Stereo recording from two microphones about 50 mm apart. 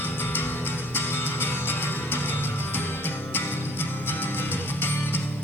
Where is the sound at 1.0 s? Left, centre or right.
Left.